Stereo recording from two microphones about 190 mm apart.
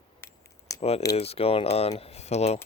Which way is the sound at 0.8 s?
35° left (ahead or behind).